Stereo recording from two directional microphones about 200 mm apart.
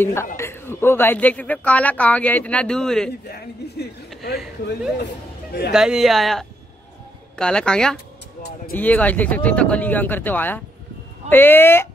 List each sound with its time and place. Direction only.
0.0 s speech: 10° left (ahead or behind)
3.3 s speech: 55° left (ahead or behind)
5.7 s speech: 5° right (ahead or behind)